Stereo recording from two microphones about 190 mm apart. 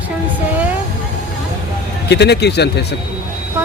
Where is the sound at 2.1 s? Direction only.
60° left (ahead or behind).